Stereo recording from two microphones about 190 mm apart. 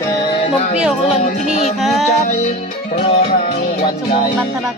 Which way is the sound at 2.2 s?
40° left (ahead or behind).